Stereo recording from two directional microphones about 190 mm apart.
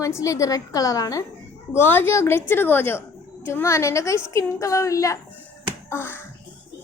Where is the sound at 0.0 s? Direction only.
15° left (ahead or behind).